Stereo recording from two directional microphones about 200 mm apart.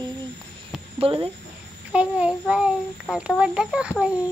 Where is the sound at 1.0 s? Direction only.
30° right (ahead or behind).